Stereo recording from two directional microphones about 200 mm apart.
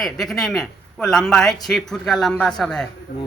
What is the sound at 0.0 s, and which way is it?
Speech, centre (ahead or behind).